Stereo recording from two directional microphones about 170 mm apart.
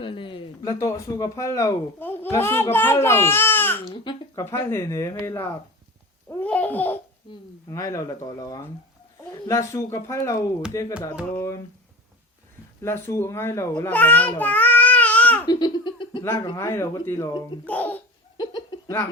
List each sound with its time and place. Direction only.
0.0 s a sound: 30° left (ahead or behind)
0.7 s speech: 15° left (ahead or behind)
3.8 s speech: 30° left (ahead or behind)
4.4 s speech: 15° left (ahead or behind)
12.8 s a child's voice: 15° left (ahead or behind)
15.4 s chuckle: 25° left (ahead or behind)
16.2 s speech: 15° left (ahead or behind)
17.7 s a child's voice: 10° left (ahead or behind)
18.3 s laughter: 25° left (ahead or behind)